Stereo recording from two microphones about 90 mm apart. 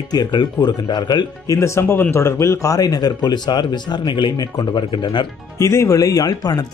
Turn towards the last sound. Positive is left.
turn(degrees=45)  # may be behind; listen again after turning